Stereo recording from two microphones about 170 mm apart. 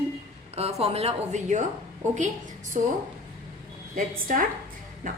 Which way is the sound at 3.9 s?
50° right (ahead or behind).